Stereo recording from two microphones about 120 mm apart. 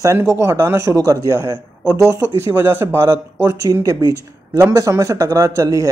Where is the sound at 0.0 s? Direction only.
20° right (ahead or behind).